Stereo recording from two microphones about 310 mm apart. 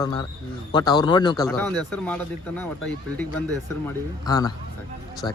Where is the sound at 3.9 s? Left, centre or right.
Centre.